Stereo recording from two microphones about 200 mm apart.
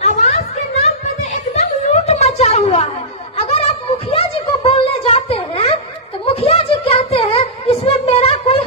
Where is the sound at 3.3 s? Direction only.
30° left (ahead or behind).